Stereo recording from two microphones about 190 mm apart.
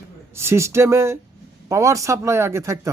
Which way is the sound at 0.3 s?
15° right (ahead or behind).